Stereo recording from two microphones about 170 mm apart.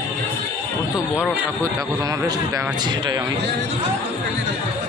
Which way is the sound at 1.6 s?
20° right (ahead or behind).